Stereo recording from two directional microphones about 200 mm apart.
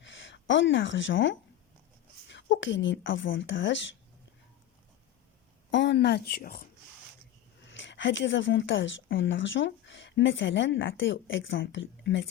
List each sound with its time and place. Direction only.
0.0 s speech: 65° left (ahead or behind)
5.7 s speech: 60° left (ahead or behind); by 6.7 s 45° left (ahead or behind)
7.6 s speech: 65° left (ahead or behind)